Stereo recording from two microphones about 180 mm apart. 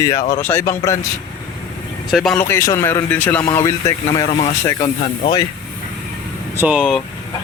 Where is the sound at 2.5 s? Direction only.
15° left (ahead or behind).